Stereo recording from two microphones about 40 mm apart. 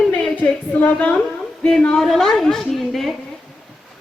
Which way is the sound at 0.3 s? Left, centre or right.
Left.